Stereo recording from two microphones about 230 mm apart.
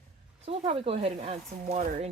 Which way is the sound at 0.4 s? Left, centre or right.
Right.